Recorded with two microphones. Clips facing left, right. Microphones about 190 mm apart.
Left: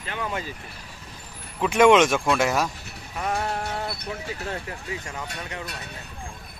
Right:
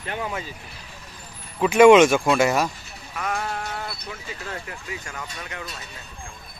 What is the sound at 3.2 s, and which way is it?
Music, 30° left (ahead or behind).